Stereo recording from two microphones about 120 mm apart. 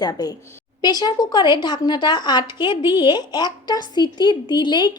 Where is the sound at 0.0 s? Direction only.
30° left (ahead or behind).